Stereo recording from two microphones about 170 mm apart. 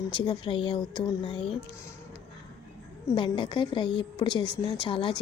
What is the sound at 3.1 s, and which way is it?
A woman's voice, 30° left (ahead or behind).